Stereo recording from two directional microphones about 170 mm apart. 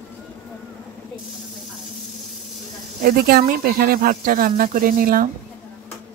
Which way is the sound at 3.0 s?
65° right (ahead or behind).